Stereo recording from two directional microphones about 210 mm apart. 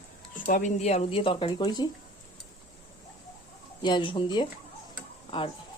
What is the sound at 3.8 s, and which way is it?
Speech, 20° left (ahead or behind).